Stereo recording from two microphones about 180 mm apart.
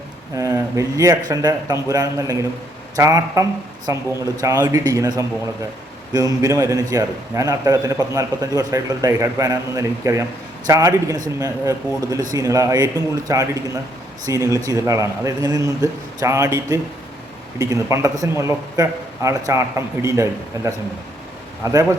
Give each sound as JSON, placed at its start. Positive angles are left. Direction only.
{"t": 0.3, "sound": "a man's voice", "side_deg": -15}
{"t": 21.6, "sound": "speech", "side_deg": -20}